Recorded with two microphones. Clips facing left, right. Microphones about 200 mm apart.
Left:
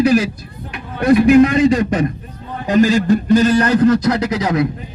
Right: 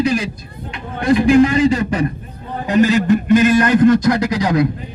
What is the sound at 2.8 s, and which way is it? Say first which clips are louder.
A man's voice: right 1 dB; 35° left (ahead or behind).